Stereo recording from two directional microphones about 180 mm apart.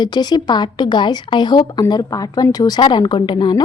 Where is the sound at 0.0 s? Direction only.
25° left (ahead or behind).